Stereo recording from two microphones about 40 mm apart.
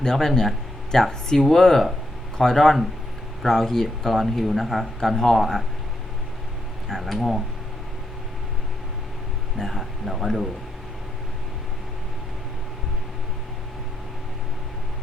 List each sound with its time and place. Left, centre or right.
0.0 s speech: centre
7.0 s speech: centre
9.6 s speech: centre
10.1 s speech: centre